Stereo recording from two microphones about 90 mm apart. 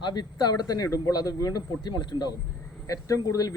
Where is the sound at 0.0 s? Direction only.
50° left (ahead or behind).